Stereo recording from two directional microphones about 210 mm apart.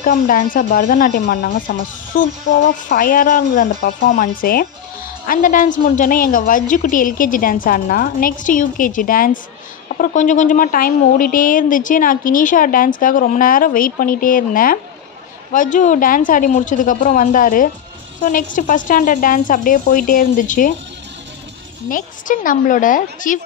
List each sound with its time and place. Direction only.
0.0 s speech: 40° left (ahead or behind)
21.8 s speech: 40° left (ahead or behind)